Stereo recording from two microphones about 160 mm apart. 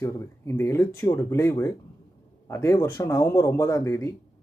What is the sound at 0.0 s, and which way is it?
Speech, 15° left (ahead or behind).